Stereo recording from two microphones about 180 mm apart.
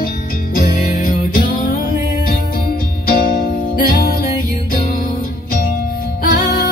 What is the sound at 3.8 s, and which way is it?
Music, 55° left (ahead or behind).